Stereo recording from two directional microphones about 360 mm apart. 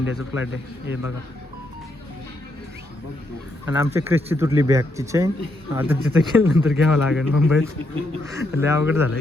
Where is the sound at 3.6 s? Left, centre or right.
Centre.